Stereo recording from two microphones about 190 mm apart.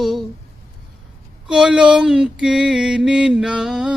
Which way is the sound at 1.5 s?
5° right (ahead or behind).